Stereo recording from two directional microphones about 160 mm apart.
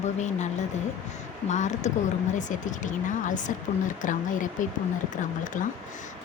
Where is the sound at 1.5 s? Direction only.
50° left (ahead or behind).